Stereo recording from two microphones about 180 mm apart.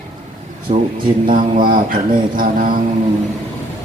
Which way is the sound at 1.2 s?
50° right (ahead or behind).